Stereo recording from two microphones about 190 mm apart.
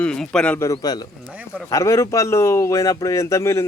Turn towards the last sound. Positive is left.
turn(degrees=15)  # may be behind; listen again after turning